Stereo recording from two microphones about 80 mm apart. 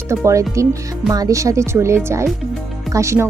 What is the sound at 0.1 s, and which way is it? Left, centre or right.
Speech, right.